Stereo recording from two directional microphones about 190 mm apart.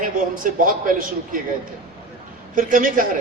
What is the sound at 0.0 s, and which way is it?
A man's voice, 45° right (ahead or behind).